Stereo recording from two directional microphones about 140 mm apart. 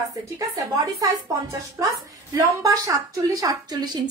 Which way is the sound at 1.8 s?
25° right (ahead or behind).